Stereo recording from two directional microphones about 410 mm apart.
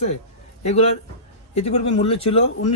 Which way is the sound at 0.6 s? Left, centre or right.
Centre.